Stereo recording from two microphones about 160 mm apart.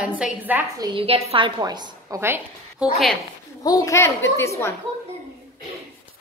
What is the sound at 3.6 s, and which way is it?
Speech, 20° left (ahead or behind).